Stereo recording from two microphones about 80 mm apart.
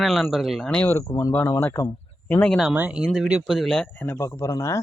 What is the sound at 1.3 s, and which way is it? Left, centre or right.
Speech, left.